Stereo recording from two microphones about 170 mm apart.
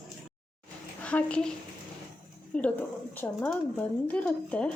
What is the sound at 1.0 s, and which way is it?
Speech, 5° left (ahead or behind).